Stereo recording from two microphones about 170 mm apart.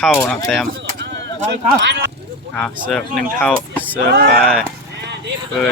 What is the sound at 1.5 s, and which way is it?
Speech, 90° right.